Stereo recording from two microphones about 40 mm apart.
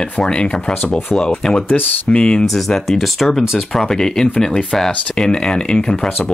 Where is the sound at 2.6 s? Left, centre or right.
Centre.